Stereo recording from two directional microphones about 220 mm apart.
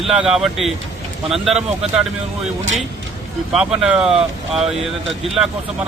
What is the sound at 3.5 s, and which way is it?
Speech, 5° right (ahead or behind).